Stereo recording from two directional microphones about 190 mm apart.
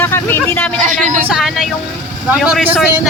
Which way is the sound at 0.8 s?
40° right (ahead or behind).